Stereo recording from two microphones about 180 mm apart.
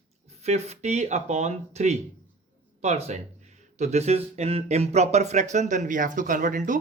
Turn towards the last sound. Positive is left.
turn(degrees=-45)  # may be behind; listen again after turning